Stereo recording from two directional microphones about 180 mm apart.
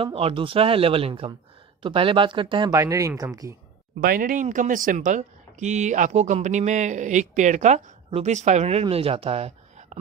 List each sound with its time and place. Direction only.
0.0 s speech: 30° right (ahead or behind)
4.0 s speech: 50° right (ahead or behind)